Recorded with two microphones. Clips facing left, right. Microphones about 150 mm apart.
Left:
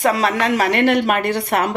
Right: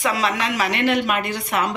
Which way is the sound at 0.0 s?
50° left (ahead or behind).